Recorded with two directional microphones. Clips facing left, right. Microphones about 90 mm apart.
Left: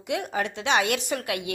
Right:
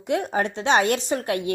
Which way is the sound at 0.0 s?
35° right (ahead or behind).